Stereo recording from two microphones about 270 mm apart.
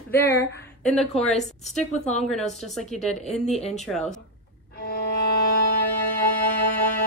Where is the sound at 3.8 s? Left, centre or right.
Centre.